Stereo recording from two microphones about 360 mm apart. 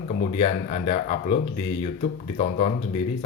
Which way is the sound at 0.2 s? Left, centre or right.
Centre.